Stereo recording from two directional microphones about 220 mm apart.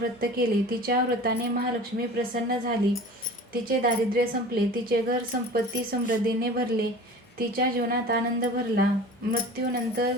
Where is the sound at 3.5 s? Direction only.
40° right (ahead or behind).